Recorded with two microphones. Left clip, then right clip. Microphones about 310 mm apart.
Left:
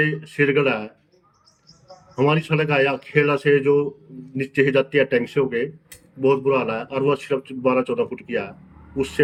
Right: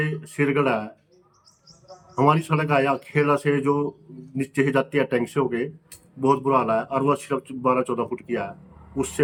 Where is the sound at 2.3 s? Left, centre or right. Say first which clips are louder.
Even; centre.